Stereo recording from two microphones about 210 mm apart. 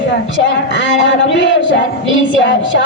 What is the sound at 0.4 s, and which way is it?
A woman's voice, 60° left (ahead or behind).